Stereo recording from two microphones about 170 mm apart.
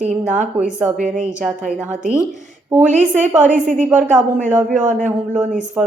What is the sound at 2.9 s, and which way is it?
Speech, 45° right (ahead or behind).